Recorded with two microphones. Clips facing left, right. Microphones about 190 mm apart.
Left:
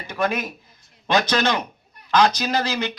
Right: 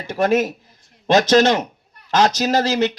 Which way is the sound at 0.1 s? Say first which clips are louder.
Right 7 dB; 45° right (ahead or behind).